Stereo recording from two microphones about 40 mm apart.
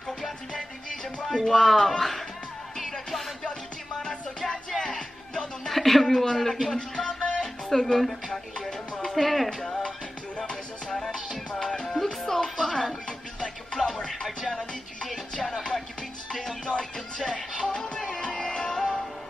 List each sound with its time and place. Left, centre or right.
1.3 s speech: centre
2.8 s music: centre
4.0 s music: centre
5.7 s speech: centre
7.2 s music: left
7.7 s speech: centre
9.0 s speech: centre
9.5 s speech: centre
10.3 s music: left
16.3 s music: centre